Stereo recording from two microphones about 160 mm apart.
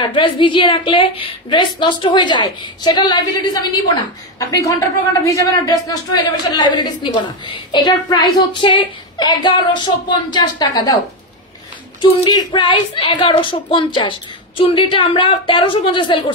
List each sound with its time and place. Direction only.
0.0 s a woman's voice: 30° left (ahead or behind)
12.0 s a woman's voice: 30° left (ahead or behind)